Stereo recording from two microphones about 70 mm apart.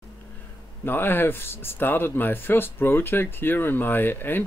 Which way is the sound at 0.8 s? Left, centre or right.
Left.